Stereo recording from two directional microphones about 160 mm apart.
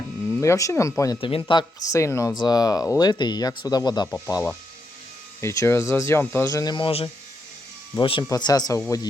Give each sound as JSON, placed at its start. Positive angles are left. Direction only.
{"t": 0.3, "sound": "speech", "side_deg": 20}
{"t": 1.2, "sound": "speech", "side_deg": 30}
{"t": 1.9, "sound": "speech", "side_deg": 20}
{"t": 5.4, "sound": "speech", "side_deg": 15}
{"t": 6.5, "sound": "speech", "side_deg": 25}